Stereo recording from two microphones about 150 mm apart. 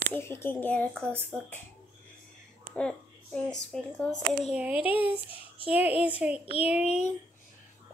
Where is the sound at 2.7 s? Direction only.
5° left (ahead or behind).